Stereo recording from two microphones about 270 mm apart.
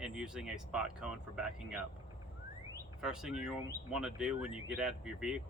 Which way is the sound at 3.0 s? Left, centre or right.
Centre.